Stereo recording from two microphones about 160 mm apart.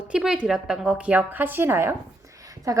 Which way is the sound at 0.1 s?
5° right (ahead or behind).